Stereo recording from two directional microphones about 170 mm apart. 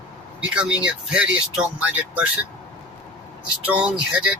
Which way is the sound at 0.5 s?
5° right (ahead or behind).